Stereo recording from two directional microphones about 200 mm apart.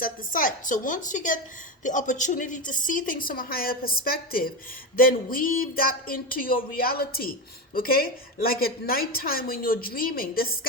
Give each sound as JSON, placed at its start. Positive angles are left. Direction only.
{"t": 0.0, "sound": "a woman's voice", "side_deg": 45}